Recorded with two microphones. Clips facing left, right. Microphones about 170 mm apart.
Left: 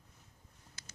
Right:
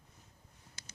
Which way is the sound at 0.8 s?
20° right (ahead or behind).